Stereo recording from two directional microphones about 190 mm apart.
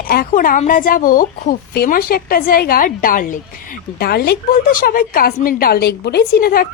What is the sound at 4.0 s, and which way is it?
A woman's voice, 55° left (ahead or behind).